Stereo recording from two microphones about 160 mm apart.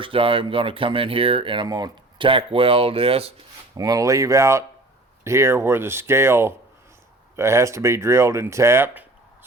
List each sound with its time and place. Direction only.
0.0 s speech: 35° right (ahead or behind)
3.8 s speech: 20° right (ahead or behind)